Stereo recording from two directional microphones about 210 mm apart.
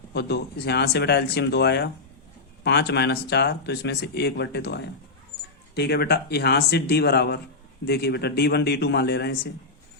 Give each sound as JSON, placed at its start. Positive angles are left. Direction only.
{"t": 0.1, "sound": "speech", "side_deg": 50}